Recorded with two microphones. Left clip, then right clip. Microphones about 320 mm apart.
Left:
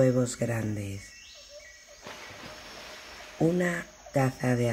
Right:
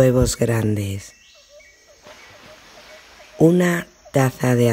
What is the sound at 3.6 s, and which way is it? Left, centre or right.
Speech, right.